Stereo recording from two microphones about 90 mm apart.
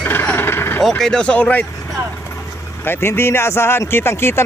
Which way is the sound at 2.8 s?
25° left (ahead or behind).